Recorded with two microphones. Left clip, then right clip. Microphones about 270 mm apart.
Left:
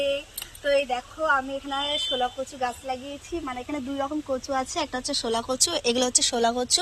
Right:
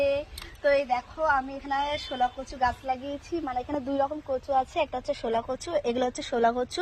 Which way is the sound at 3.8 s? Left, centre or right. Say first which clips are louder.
Left 1 dB; right.